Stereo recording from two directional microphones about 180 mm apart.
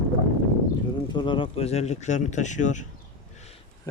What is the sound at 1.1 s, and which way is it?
Speech, 25° left (ahead or behind).